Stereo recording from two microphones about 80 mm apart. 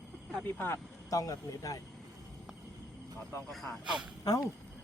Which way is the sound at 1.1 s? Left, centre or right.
Left.